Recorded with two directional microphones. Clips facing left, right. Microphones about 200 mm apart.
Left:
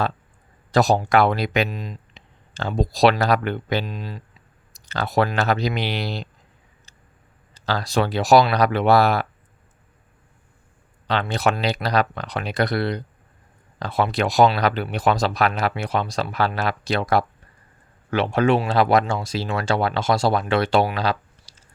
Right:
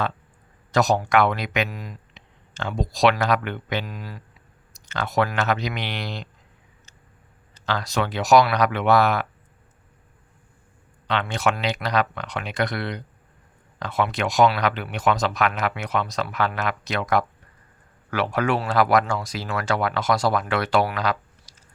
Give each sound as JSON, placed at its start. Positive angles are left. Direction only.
{"t": 0.7, "sound": "speech", "side_deg": 30}
{"t": 7.5, "sound": "speech", "side_deg": 35}
{"t": 11.0, "sound": "speech", "side_deg": 35}